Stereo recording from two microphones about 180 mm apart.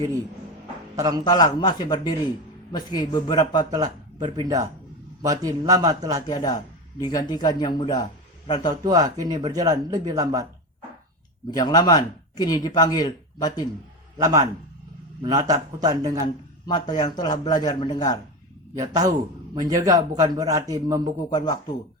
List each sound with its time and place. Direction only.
0.9 s speech: 20° right (ahead or behind)
1.2 s speech: 20° left (ahead or behind)
3.7 s speech: 20° right (ahead or behind)
6.2 s speech: 20° left (ahead or behind)
8.7 s speech: 20° right (ahead or behind)
11.5 s speech: 20° left (ahead or behind)
14.2 s speech: 20° right (ahead or behind)
16.2 s speech: 25° left (ahead or behind)
18.7 s speech: 20° right (ahead or behind)
21.2 s speech: 20° left (ahead or behind)